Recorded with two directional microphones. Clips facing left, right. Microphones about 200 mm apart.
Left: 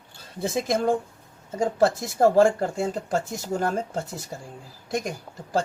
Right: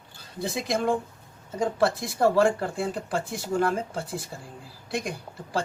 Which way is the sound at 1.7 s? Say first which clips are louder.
Left 4 dB; 40° left (ahead or behind).